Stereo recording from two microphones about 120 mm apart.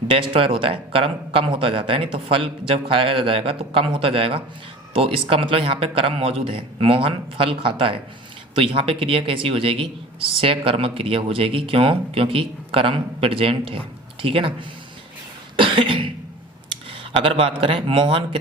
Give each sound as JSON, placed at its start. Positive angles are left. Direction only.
{"t": 0.1, "sound": "speech", "side_deg": -50}
{"t": 15.5, "sound": "cough", "side_deg": -45}
{"t": 16.9, "sound": "speech", "side_deg": -50}